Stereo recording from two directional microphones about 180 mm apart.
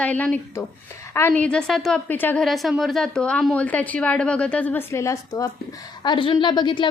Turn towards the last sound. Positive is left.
turn(degrees=25)  # may be behind; listen again after turning